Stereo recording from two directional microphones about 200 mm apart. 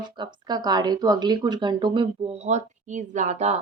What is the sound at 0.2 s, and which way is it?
A woman's voice, 20° right (ahead or behind).